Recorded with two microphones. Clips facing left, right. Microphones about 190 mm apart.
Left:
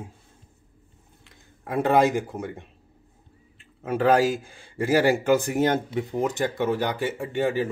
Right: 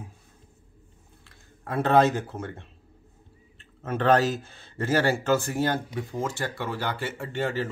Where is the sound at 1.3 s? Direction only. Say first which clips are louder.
Left 2 dB; 15° left (ahead or behind).